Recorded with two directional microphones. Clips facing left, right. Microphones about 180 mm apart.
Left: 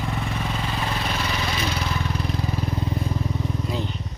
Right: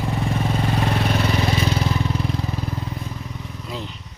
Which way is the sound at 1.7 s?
30° right (ahead or behind).